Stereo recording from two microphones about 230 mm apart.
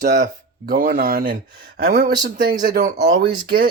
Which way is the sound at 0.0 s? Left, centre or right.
Right.